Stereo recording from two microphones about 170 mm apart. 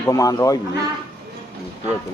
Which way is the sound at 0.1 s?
20° left (ahead or behind).